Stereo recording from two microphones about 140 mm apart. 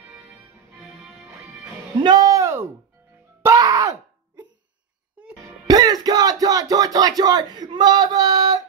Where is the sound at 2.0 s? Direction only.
25° right (ahead or behind).